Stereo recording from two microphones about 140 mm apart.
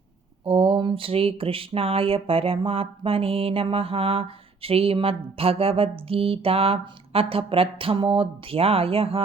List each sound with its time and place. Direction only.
0.4 s speech: 40° right (ahead or behind)